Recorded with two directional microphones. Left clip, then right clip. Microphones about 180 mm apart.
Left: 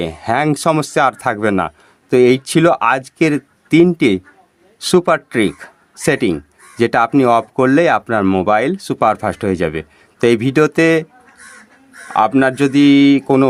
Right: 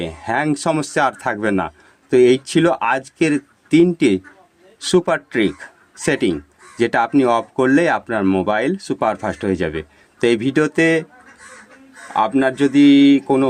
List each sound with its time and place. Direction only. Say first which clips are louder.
0.0 s speech: left 4 dB; 30° left (ahead or behind)
12.1 s speech: left 4 dB; 30° left (ahead or behind)